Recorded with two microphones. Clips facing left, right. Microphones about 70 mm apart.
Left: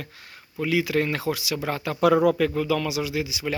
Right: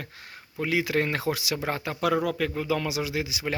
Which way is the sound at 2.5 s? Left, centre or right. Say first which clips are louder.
Left 3 dB; right.